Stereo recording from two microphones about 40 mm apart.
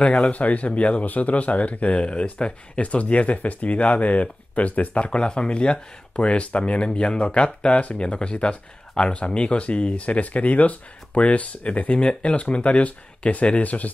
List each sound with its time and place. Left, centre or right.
0.3 s speech: left